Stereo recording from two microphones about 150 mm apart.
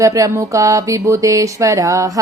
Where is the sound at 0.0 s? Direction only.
20° right (ahead or behind).